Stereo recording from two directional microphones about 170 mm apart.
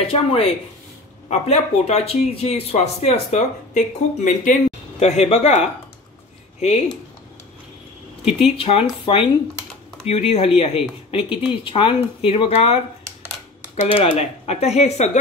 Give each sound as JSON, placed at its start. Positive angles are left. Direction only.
{"t": 0.0, "sound": "speech", "side_deg": 35}
{"t": 8.4, "sound": "speech", "side_deg": 35}
{"t": 13.8, "sound": "speech", "side_deg": 35}